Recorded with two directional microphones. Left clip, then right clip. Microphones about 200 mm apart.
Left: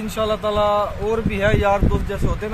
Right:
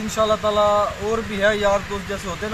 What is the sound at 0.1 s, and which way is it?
Speech, 25° left (ahead or behind).